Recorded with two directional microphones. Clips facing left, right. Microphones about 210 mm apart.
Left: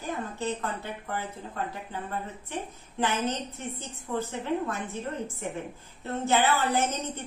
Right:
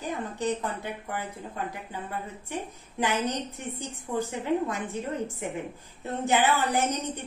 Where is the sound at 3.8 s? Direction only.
15° right (ahead or behind).